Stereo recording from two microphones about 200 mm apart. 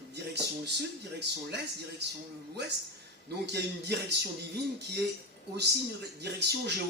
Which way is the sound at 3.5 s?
55° right (ahead or behind).